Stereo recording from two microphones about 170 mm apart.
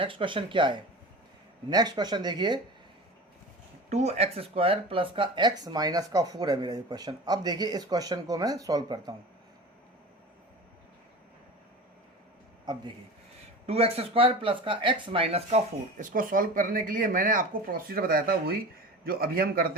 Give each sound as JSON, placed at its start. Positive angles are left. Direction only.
{"t": 0.0, "sound": "speech", "side_deg": -30}
{"t": 3.8, "sound": "speech", "side_deg": -40}
{"t": 13.7, "sound": "a man's voice", "side_deg": -35}